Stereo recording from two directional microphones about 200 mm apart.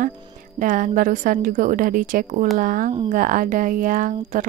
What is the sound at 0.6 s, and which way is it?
Speech, 40° right (ahead or behind).